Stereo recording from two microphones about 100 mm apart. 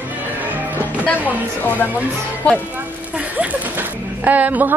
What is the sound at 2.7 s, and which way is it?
Speech, 15° right (ahead or behind).